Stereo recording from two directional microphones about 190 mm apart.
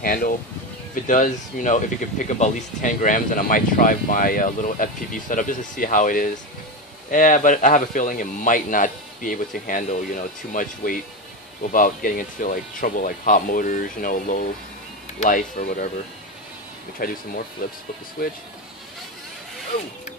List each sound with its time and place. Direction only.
0.0 s speech: 50° left (ahead or behind)
17.0 s speech: 50° left (ahead or behind)